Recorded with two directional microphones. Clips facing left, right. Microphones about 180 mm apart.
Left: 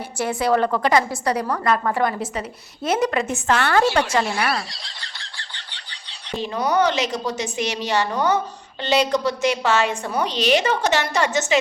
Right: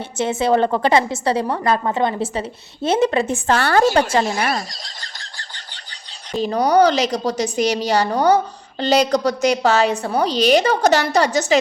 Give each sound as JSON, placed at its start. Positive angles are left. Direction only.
{"t": 0.2, "sound": "a woman's voice", "side_deg": -25}
{"t": 4.1, "sound": "a sound", "side_deg": -40}
{"t": 6.4, "sound": "a woman's voice", "side_deg": -40}